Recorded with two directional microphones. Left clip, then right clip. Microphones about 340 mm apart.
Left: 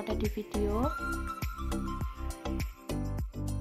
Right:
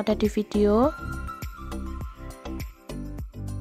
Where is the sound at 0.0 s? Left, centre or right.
Right.